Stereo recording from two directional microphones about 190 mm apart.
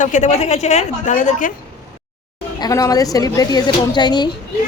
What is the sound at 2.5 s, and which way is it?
A woman's voice, 20° left (ahead or behind).